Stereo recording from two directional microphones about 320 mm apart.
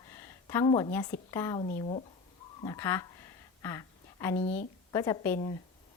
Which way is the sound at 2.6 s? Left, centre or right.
Centre.